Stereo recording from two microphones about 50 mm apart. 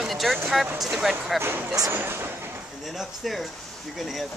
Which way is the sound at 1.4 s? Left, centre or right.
Right.